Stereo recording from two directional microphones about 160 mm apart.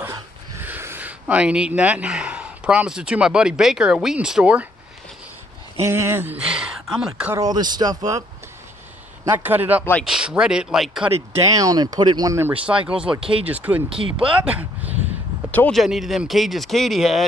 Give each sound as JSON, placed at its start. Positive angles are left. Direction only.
{"t": 0.0, "sound": "speech", "side_deg": -15}
{"t": 5.8, "sound": "speech", "side_deg": -15}
{"t": 7.3, "sound": "speech", "side_deg": -25}
{"t": 9.2, "sound": "a man's voice", "side_deg": -10}
{"t": 11.5, "sound": "speech", "side_deg": -25}
{"t": 12.6, "sound": "a man's voice", "side_deg": -5}
{"t": 13.8, "sound": "speech", "side_deg": -35}
{"t": 14.4, "sound": "speech", "side_deg": -10}
{"t": 15.5, "sound": "speech", "side_deg": 5}